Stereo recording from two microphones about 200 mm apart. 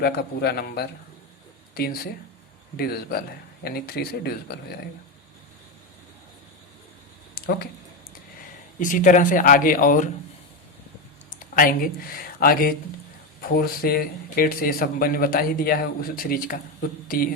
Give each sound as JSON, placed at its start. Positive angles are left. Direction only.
{"t": 0.0, "sound": "speech", "side_deg": 50}
{"t": 8.8, "sound": "speech", "side_deg": 40}
{"t": 11.5, "sound": "speech", "side_deg": 45}
{"t": 13.8, "sound": "speech", "side_deg": 45}